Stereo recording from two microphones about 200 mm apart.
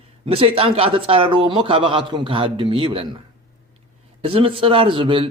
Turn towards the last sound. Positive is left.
turn(degrees=-25)  # may be behind; listen again after turning